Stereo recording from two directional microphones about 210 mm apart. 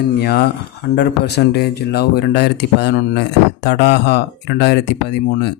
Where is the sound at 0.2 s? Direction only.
50° left (ahead or behind).